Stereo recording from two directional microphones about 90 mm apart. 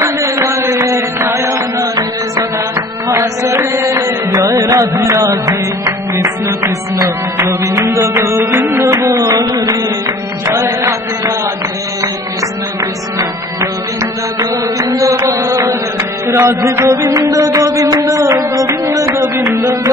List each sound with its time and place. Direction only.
0.0 s music: 35° right (ahead or behind)
10.4 s mantra: 35° right (ahead or behind)
14.4 s music: 40° right (ahead or behind)